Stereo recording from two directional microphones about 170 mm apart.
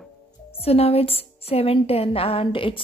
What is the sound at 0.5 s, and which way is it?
A woman's voice, 35° left (ahead or behind).